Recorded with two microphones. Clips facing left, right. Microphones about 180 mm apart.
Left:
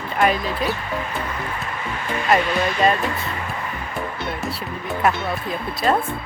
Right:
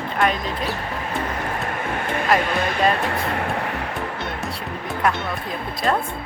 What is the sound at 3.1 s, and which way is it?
Music, 65° right (ahead or behind).